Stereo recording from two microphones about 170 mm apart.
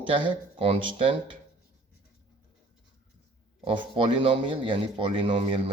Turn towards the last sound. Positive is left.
turn(degrees=-30)  # may be behind; listen again after turning